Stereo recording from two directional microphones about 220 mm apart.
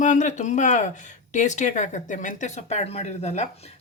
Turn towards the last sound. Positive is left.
turn(degrees=30)  # may be behind; listen again after turning